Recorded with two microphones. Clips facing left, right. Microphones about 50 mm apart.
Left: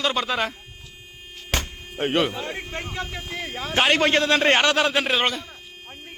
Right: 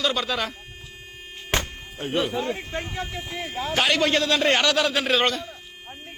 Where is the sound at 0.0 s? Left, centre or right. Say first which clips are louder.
Left 1 dB; left.